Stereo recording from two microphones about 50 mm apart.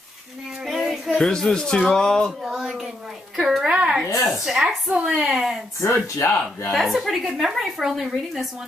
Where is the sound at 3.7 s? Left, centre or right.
Right.